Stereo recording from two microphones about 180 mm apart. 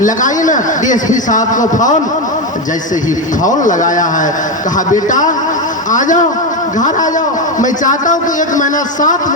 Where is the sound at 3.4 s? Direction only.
45° left (ahead or behind).